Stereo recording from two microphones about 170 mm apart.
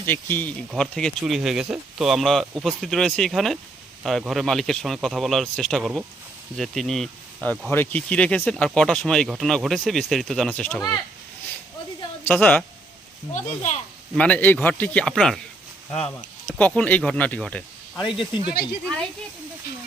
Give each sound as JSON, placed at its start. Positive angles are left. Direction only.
{"t": 0.0, "sound": "speech", "side_deg": 10}
{"t": 7.7, "sound": "speech", "side_deg": 10}
{"t": 12.2, "sound": "speech", "side_deg": 10}
{"t": 13.3, "sound": "speech", "side_deg": 45}
{"t": 14.2, "sound": "speech", "side_deg": 10}
{"t": 16.6, "sound": "speech", "side_deg": 10}
{"t": 18.0, "sound": "speech", "side_deg": 30}